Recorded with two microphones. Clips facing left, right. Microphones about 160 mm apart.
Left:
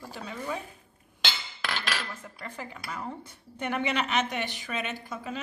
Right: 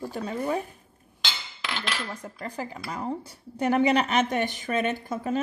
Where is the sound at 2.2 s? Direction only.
40° right (ahead or behind).